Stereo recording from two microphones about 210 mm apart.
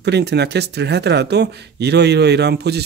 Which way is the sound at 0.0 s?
55° right (ahead or behind).